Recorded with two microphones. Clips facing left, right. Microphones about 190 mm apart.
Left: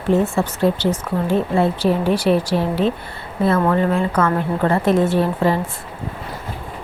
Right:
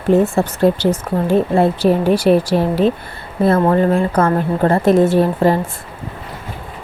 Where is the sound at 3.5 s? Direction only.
40° right (ahead or behind).